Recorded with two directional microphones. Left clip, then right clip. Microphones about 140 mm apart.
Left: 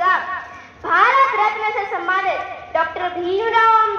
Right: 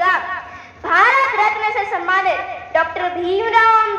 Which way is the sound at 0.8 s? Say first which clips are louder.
Right 1 dB; 25° right (ahead or behind).